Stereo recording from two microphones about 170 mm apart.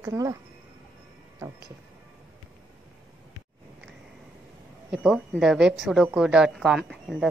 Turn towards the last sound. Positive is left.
turn(degrees=0)  # may be behind; listen again after turning